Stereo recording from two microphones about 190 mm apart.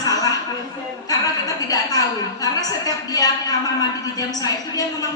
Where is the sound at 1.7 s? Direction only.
20° left (ahead or behind).